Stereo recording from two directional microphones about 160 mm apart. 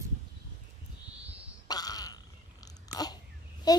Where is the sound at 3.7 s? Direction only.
25° left (ahead or behind).